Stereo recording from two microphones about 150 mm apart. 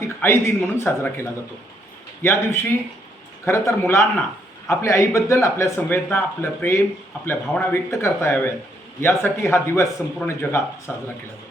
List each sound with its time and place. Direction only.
0.0 s speech: 15° left (ahead or behind)